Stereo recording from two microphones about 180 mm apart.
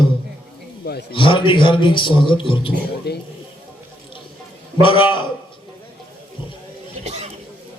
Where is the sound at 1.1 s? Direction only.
30° left (ahead or behind).